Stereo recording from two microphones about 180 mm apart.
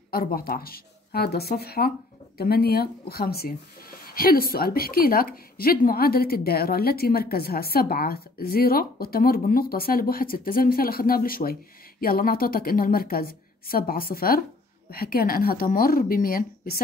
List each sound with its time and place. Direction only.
0.1 s speech: 55° left (ahead or behind)